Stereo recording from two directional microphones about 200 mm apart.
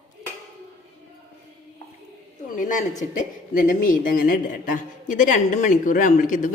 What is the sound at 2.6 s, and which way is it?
A man's voice, 40° left (ahead or behind).